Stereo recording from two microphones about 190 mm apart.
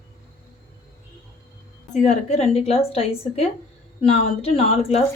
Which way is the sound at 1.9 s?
40° left (ahead or behind).